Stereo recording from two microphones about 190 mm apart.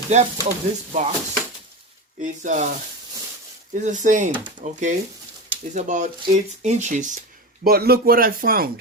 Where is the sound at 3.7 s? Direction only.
40° right (ahead or behind).